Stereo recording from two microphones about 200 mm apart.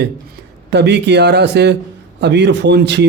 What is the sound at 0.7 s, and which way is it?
A man's voice, 60° right (ahead or behind).